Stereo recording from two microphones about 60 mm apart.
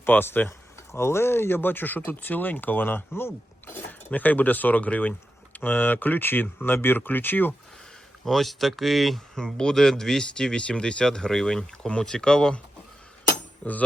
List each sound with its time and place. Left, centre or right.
0.0 s speech: left
0.9 s speech: left
4.1 s speech: left
8.2 s speech: centre
13.6 s speech: centre